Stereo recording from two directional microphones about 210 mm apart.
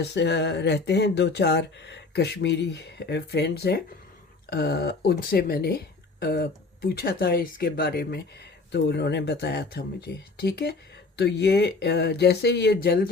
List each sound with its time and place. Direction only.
0.0 s speech: 55° left (ahead or behind)